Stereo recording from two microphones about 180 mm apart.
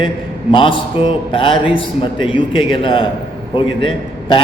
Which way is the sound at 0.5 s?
25° left (ahead or behind).